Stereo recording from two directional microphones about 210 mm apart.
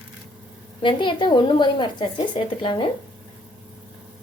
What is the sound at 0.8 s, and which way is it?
A woman's voice, 25° left (ahead or behind).